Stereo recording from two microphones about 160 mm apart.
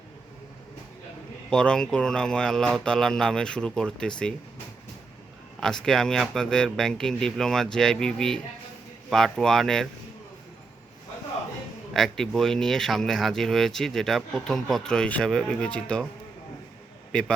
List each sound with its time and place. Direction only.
1.5 s speech: 5° left (ahead or behind)
5.5 s speech: 5° left (ahead or behind)
11.9 s speech: 5° left (ahead or behind)
17.1 s a man's voice: 5° left (ahead or behind)